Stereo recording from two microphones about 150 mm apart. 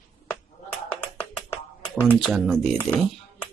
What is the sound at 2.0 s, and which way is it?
Speech, 10° left (ahead or behind).